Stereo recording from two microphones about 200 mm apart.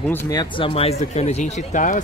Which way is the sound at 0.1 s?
15° left (ahead or behind).